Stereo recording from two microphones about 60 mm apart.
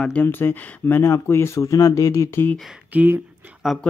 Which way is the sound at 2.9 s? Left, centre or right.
Right.